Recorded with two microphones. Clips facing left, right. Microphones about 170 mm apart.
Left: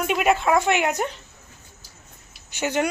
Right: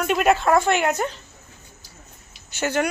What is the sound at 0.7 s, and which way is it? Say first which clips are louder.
Speech: right 1 dB; 15° left (ahead or behind).